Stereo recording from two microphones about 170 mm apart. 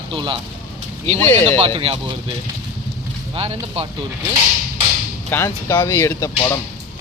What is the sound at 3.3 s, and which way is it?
Speech, 35° right (ahead or behind).